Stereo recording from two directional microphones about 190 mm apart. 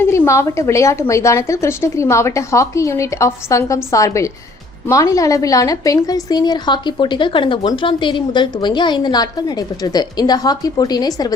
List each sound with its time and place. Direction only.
0.0 s a woman's voice: 15° left (ahead or behind)